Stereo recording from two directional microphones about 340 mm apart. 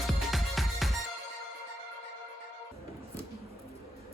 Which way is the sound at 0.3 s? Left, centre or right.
Centre.